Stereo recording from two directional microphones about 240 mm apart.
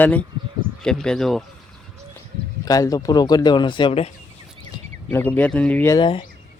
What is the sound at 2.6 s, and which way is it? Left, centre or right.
Speech, centre.